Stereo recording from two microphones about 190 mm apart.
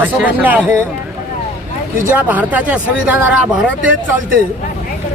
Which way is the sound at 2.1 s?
10° right (ahead or behind).